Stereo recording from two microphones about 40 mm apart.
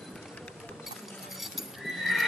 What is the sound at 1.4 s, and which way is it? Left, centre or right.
Horse, centre.